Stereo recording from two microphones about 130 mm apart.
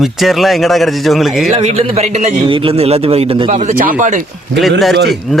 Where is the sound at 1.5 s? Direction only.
60° right (ahead or behind).